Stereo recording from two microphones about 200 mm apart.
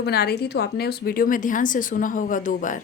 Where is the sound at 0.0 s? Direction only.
55° left (ahead or behind).